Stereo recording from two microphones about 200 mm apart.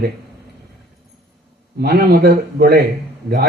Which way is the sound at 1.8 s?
50° right (ahead or behind).